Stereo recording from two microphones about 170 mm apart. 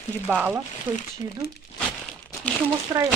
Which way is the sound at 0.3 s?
10° right (ahead or behind).